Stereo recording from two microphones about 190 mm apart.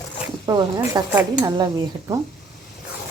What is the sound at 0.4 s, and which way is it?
Speech, 15° right (ahead or behind).